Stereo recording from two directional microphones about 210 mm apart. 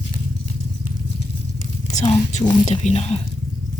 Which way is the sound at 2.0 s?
35° left (ahead or behind).